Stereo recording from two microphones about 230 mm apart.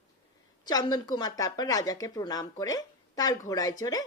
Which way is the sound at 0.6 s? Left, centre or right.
Centre.